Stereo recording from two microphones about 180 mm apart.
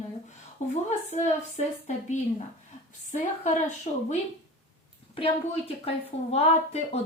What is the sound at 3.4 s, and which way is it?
A woman's voice, 40° left (ahead or behind).